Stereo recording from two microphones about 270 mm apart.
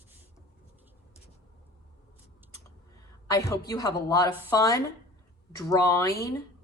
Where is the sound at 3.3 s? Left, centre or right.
Centre.